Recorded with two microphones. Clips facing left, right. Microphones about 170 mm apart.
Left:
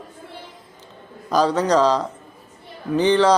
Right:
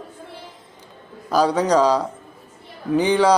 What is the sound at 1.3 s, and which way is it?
Speech, 10° right (ahead or behind).